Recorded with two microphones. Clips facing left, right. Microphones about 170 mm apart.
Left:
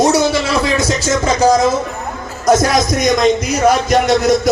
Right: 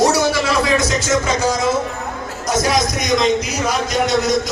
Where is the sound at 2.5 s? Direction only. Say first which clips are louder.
Left 6 dB; 50° left (ahead or behind).